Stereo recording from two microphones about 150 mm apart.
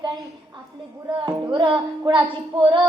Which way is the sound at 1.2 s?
35° right (ahead or behind).